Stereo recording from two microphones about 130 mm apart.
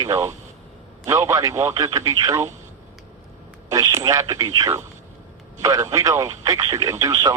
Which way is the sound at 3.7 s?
25° right (ahead or behind).